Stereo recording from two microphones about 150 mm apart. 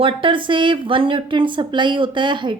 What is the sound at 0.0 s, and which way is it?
A woman's voice, 35° right (ahead or behind).